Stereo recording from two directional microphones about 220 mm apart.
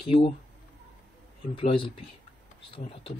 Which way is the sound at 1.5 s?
25° left (ahead or behind).